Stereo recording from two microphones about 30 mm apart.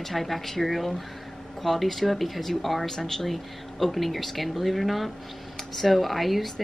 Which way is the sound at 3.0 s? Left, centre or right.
Centre.